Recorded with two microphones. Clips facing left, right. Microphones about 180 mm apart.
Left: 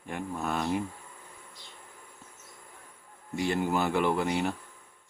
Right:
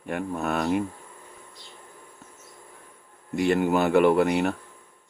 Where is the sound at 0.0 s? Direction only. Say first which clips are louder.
Right 5 dB; 65° right (ahead or behind).